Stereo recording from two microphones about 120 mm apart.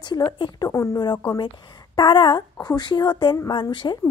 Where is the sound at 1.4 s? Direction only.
40° left (ahead or behind).